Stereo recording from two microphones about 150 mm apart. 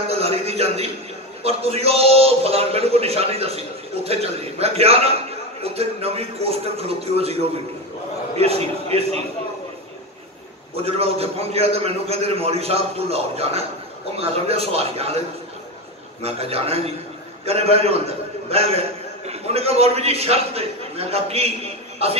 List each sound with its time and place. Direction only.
0.2 s a sound: 45° right (ahead or behind)
1.4 s a man's voice: 40° right (ahead or behind)
8.4 s a man's voice: 45° right (ahead or behind)
10.9 s a man's voice: 40° right (ahead or behind)